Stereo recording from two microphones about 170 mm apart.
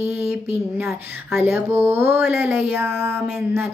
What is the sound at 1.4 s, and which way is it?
Speech, 15° right (ahead or behind).